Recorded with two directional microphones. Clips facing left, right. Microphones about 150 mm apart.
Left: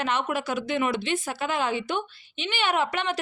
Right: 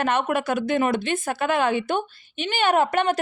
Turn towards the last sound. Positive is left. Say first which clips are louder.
# right 6 dB
turn(degrees=-45)  # may be behind; listen again after turning